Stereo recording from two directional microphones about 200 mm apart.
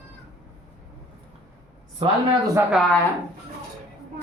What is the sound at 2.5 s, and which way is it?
Speech, 5° right (ahead or behind).